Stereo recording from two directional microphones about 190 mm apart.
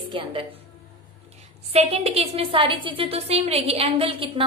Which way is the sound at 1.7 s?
35° right (ahead or behind).